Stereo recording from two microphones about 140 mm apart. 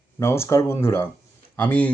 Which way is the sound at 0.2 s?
20° left (ahead or behind).